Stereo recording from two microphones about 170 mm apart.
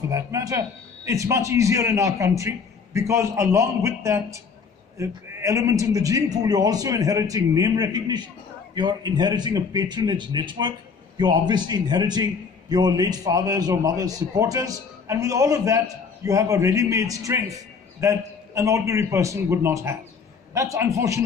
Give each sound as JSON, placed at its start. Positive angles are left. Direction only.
{"t": 0.1, "sound": "a man's voice", "side_deg": -20}